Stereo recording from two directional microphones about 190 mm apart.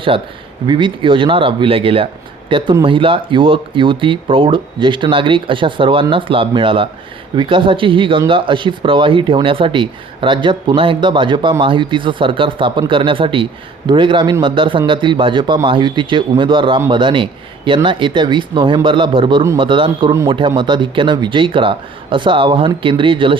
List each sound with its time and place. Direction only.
0.1 s speech: 30° right (ahead or behind)